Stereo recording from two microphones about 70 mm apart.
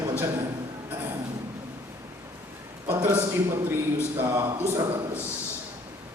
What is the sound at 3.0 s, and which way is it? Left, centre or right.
A man's voice, right.